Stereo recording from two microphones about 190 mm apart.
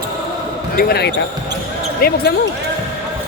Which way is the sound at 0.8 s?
55° left (ahead or behind).